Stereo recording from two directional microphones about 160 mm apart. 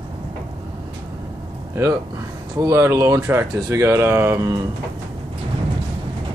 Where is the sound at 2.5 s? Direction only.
20° right (ahead or behind).